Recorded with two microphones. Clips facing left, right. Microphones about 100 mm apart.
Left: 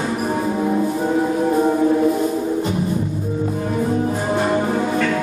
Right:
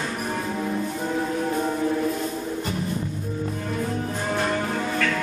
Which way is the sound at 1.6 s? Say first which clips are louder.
Left 8 dB; 20° left (ahead or behind).